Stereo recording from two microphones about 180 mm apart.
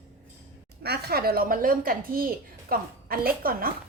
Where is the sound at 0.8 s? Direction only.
60° right (ahead or behind).